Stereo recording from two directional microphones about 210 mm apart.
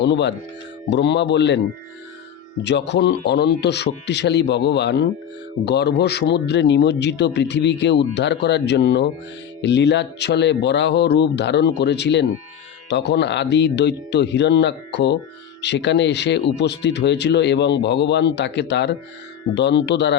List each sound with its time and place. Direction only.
0.0 s speech: 55° left (ahead or behind)
2.6 s speech: 55° left (ahead or behind)